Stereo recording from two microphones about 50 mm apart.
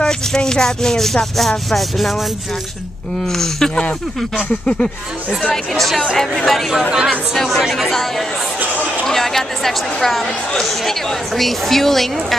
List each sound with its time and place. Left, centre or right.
0.0 s speech: centre
3.3 s speech: centre
5.5 s speech: centre
6.9 s speech: centre
7.4 s speech: centre
9.0 s speech: centre